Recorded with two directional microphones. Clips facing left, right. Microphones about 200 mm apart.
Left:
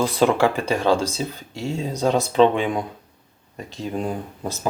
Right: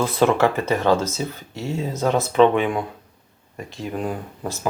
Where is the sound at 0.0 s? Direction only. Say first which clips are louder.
Even; 15° left (ahead or behind).